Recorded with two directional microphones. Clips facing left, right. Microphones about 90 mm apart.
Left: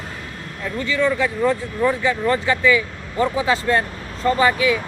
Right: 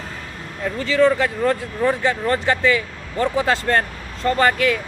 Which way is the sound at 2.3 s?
45° right (ahead or behind).